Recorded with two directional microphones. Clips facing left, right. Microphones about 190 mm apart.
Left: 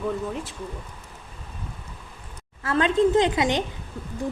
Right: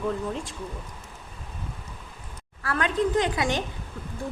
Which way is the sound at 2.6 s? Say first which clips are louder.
Left 5 dB; 25° left (ahead or behind).